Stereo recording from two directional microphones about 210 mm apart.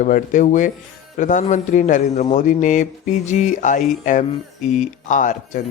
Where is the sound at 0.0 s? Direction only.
35° left (ahead or behind).